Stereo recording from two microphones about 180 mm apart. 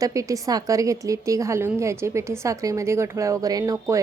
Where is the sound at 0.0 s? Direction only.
20° right (ahead or behind).